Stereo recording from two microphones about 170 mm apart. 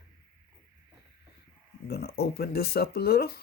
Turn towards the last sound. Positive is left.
turn(degrees=65)  # may be behind; listen again after turning